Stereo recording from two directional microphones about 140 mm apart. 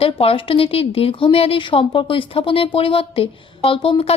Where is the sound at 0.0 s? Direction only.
45° left (ahead or behind).